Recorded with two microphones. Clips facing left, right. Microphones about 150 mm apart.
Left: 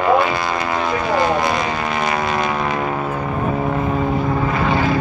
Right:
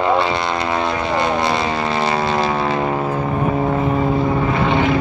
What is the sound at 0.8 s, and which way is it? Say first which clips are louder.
Vehicle: left 1 dB; 25° right (ahead or behind).